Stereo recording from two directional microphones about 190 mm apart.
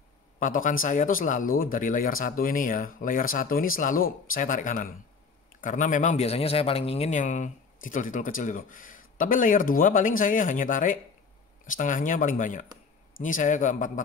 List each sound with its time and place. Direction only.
0.4 s a man's voice: 45° left (ahead or behind)